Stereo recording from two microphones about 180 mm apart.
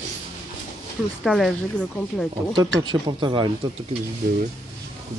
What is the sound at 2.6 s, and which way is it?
Speech, 20° right (ahead or behind).